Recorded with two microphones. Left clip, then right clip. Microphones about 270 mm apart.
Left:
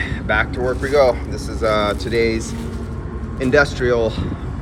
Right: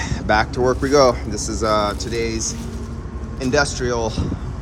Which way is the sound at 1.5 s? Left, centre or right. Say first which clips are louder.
Left 1 dB; centre.